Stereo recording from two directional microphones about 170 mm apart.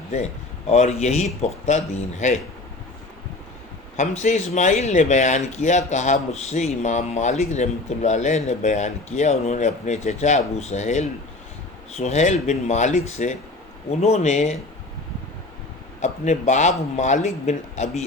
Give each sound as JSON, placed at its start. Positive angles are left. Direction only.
{"t": 0.7, "sound": "speech", "side_deg": 40}
{"t": 3.9, "sound": "speech", "side_deg": 45}
{"t": 16.0, "sound": "speech", "side_deg": 45}